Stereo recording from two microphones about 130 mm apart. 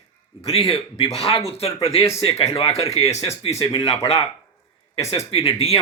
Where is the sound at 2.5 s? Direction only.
50° left (ahead or behind).